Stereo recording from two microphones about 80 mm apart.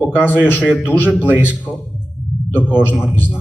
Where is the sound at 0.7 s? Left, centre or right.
Left.